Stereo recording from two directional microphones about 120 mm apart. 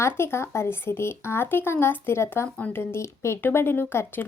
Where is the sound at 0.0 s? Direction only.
20° left (ahead or behind).